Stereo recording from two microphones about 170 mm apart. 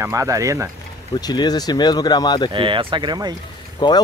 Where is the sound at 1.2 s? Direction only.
25° left (ahead or behind).